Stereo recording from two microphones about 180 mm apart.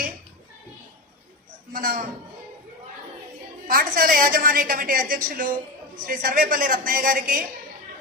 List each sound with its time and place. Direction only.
1.7 s speech: 50° right (ahead or behind)
3.7 s a woman's voice: 55° right (ahead or behind)